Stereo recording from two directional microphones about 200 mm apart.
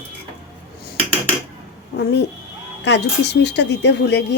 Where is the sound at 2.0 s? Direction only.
55° left (ahead or behind).